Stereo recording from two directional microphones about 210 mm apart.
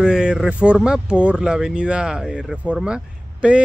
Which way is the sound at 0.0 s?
5° right (ahead or behind).